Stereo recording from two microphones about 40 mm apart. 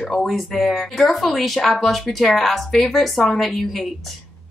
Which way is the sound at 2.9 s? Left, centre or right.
Centre.